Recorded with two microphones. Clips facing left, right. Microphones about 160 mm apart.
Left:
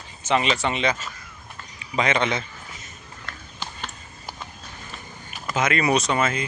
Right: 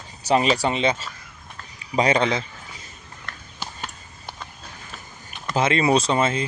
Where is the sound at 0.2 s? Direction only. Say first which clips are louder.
Right 3 dB; 35° right (ahead or behind).